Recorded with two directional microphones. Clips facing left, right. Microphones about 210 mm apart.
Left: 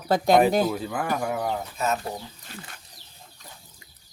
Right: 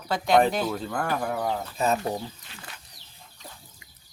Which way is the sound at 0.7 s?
5° left (ahead or behind).